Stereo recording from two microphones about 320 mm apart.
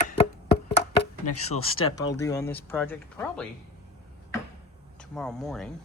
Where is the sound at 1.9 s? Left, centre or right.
Centre.